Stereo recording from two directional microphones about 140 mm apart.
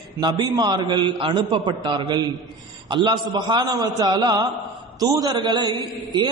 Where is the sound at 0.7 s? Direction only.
30° right (ahead or behind).